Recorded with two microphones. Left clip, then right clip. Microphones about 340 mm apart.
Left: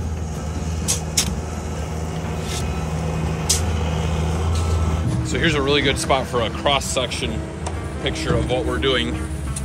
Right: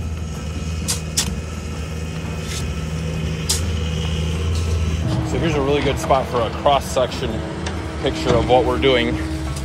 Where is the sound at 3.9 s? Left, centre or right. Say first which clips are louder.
Left 1 dB; centre.